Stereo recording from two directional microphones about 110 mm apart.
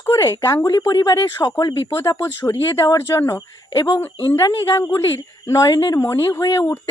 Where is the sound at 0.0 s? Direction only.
30° left (ahead or behind).